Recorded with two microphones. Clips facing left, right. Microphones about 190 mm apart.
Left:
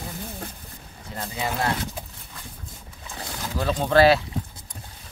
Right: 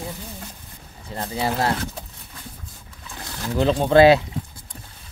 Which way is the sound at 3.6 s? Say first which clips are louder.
Right 4 dB; 20° right (ahead or behind).